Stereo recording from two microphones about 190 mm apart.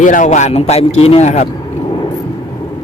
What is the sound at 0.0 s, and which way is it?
Speech, 40° left (ahead or behind).